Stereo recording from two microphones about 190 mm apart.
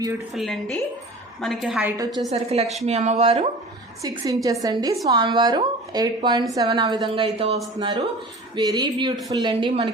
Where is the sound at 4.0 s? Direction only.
15° right (ahead or behind).